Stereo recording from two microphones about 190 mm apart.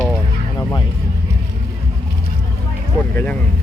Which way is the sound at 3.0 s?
5° left (ahead or behind).